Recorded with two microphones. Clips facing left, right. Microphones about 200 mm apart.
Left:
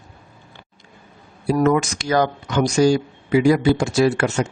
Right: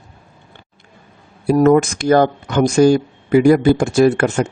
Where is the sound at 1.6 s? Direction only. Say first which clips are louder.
Right 9 dB; 50° right (ahead or behind).